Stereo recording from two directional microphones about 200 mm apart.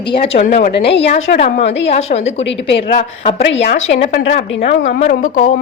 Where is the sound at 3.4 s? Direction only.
65° left (ahead or behind).